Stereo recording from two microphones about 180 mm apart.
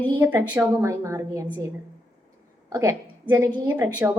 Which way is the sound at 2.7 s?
15° right (ahead or behind).